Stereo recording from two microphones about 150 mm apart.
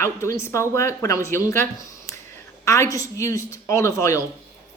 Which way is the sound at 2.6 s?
20° left (ahead or behind).